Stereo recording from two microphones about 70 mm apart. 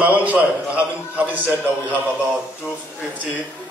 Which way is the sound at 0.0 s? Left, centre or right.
Right.